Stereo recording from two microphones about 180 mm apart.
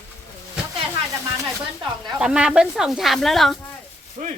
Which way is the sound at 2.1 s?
5° right (ahead or behind).